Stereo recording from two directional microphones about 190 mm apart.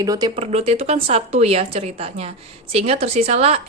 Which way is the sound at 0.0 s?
20° right (ahead or behind).